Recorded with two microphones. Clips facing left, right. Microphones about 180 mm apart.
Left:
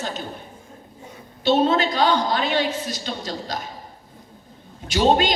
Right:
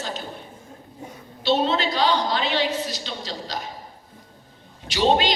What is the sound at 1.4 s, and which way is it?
A woman's voice, 50° left (ahead or behind).